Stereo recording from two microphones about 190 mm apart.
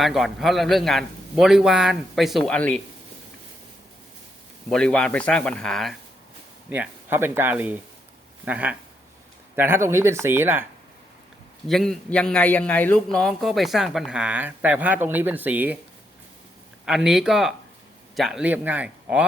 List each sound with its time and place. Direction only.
0.0 s a man's voice: centre (ahead or behind)
4.7 s a man's voice: 5° left (ahead or behind)
6.7 s speech: 10° right (ahead or behind)
11.7 s a man's voice: centre (ahead or behind)
16.8 s a man's voice: 5° right (ahead or behind)